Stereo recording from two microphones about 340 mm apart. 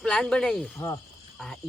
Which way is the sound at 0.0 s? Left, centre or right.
Centre.